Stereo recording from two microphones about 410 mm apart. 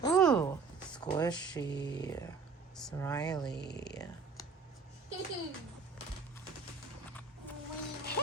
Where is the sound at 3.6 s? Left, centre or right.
Left.